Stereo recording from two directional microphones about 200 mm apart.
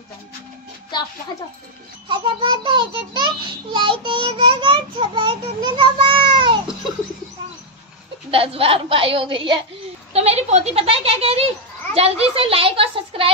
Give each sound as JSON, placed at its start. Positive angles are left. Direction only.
{"t": 2.0, "sound": "a child's voice", "side_deg": -25}
{"t": 8.3, "sound": "a child's voice", "side_deg": -30}